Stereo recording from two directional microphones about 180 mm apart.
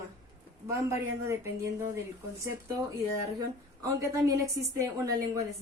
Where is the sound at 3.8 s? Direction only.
20° right (ahead or behind).